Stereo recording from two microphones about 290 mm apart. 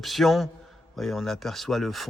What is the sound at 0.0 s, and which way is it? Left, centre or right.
Speech, centre.